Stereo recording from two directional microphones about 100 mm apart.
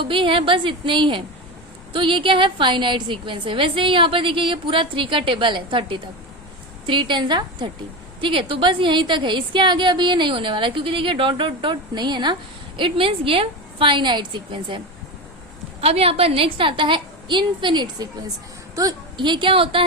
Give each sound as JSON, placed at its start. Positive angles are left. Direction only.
{"t": 0.0, "sound": "a woman's voice", "side_deg": -60}
{"t": 8.2, "sound": "a woman's voice", "side_deg": -60}
{"t": 15.8, "sound": "a woman's voice", "side_deg": -80}
{"t": 18.8, "sound": "a woman's voice", "side_deg": -40}
{"t": 19.2, "sound": "a woman's voice", "side_deg": -55}